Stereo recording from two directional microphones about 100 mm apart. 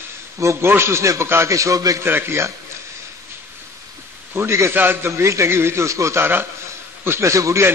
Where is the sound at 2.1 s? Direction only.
25° right (ahead or behind).